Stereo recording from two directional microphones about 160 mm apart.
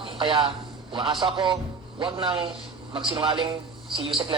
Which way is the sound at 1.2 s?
30° right (ahead or behind).